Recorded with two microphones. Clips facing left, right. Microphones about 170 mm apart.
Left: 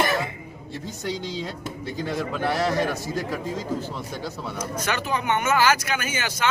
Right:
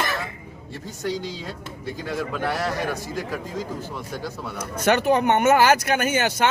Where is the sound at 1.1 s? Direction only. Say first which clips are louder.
Even; 10° right (ahead or behind).